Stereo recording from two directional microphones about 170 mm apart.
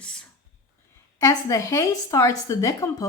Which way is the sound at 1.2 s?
20° left (ahead or behind).